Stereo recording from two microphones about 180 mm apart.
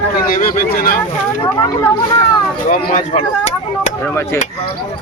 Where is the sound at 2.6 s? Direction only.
45° left (ahead or behind).